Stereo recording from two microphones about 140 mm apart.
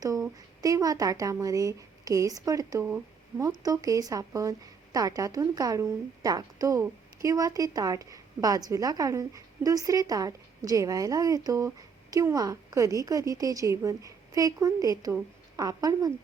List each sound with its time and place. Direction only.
0.0 s speech: 25° right (ahead or behind)